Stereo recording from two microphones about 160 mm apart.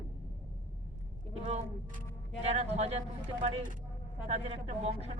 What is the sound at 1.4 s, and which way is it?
Speech, 45° right (ahead or behind).